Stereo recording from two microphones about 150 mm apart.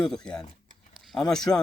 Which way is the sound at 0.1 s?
5° left (ahead or behind).